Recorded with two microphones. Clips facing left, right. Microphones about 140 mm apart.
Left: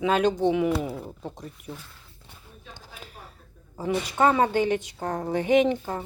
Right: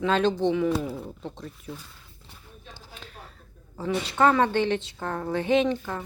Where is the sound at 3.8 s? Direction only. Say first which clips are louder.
Even; 10° left (ahead or behind).